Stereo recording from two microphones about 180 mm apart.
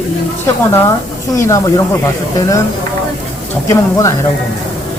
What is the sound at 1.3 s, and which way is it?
Speech, 15° left (ahead or behind).